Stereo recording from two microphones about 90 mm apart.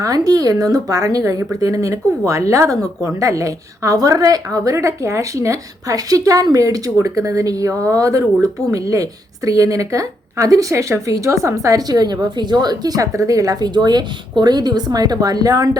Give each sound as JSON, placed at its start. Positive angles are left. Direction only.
{"t": 0.0, "sound": "a woman's voice", "side_deg": -45}